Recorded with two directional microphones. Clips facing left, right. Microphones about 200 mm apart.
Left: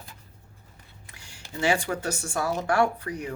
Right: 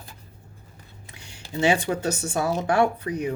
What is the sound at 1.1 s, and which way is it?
Speech, 20° right (ahead or behind).